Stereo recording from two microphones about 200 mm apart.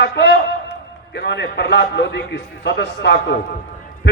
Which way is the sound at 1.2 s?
60° left (ahead or behind).